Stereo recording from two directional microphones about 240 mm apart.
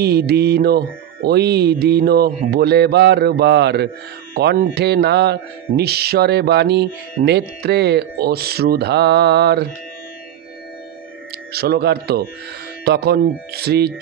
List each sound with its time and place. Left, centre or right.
0.0 s speech: right
11.5 s speech: right